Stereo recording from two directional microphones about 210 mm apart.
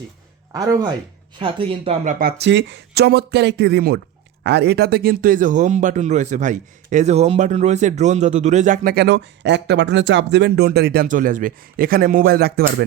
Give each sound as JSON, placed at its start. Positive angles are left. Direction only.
{"t": 0.5, "sound": "speech", "side_deg": -15}
{"t": 2.1, "sound": "speech", "side_deg": -50}